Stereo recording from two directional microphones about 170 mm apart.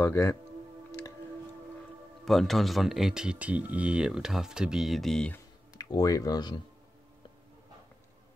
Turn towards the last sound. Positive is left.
turn(degrees=25)  # may be behind; listen again after turning